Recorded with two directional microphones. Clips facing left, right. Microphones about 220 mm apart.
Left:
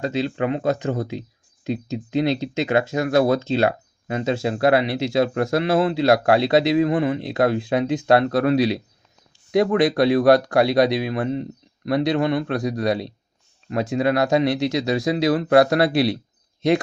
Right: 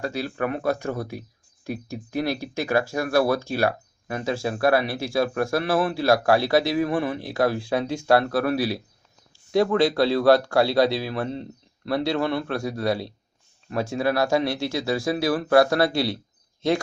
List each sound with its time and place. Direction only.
0.0 s speech: 20° left (ahead or behind)